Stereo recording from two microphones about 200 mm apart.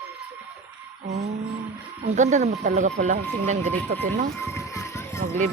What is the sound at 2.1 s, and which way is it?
A man's voice, 35° right (ahead or behind).